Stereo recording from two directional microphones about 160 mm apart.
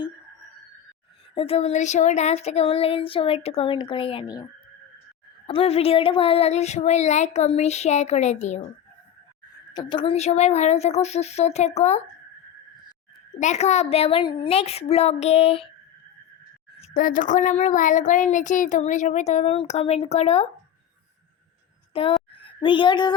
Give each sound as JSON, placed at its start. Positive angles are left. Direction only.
{"t": 1.4, "sound": "child singing", "side_deg": 35}
{"t": 5.5, "sound": "speech", "side_deg": 35}
{"t": 9.7, "sound": "speech", "side_deg": 30}
{"t": 13.4, "sound": "child singing", "side_deg": 45}
{"t": 16.9, "sound": "speech", "side_deg": 55}
{"t": 21.9, "sound": "speech", "side_deg": 35}